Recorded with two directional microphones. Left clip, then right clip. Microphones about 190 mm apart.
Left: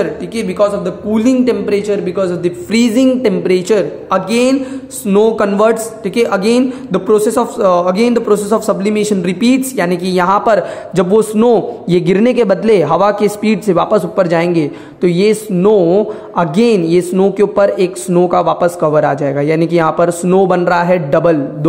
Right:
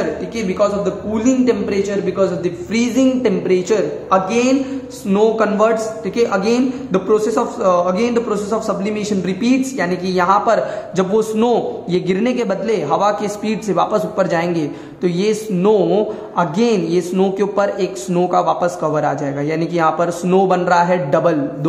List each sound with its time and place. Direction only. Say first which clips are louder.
0.4 s a man's voice: left 4 dB; 40° left (ahead or behind); by 16.1 s 25° left (ahead or behind)
16.3 s a man's voice: left 5 dB; 35° left (ahead or behind)